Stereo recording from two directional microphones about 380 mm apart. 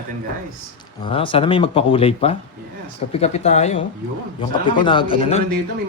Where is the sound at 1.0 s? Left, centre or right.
Centre.